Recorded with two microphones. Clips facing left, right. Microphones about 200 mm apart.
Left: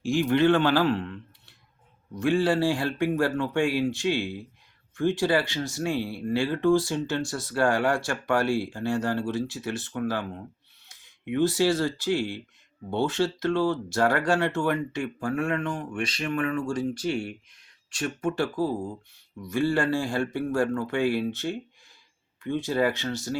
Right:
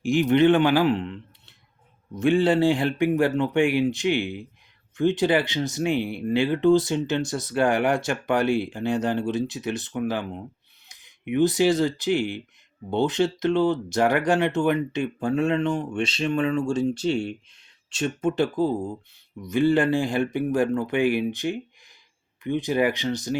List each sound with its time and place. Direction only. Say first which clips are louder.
0.0 s speech: right 3 dB; 20° right (ahead or behind)